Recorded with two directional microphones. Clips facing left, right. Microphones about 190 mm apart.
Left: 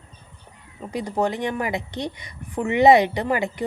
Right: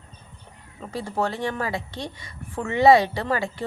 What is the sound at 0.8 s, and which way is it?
A woman's voice, 15° left (ahead or behind).